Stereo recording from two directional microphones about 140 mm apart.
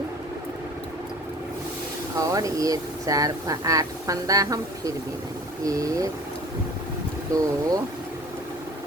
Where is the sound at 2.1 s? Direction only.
25° right (ahead or behind).